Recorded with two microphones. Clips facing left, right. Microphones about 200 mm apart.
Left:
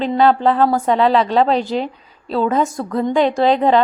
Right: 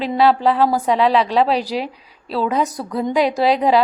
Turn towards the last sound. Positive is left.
turn(degrees=-5)  # may be behind; listen again after turning